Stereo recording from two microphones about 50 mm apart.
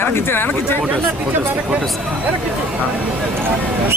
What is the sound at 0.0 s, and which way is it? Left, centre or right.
Speech, left.